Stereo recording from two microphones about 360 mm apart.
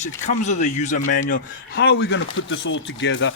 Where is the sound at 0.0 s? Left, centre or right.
Centre.